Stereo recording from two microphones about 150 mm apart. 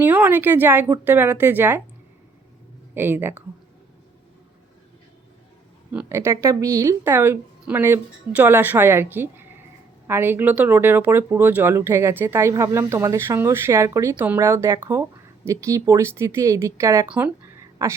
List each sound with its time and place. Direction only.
0.0 s speech: 10° right (ahead or behind)
2.9 s speech: 15° right (ahead or behind)
5.9 s speech: 10° right (ahead or behind)
17.1 s a sound: 10° right (ahead or behind)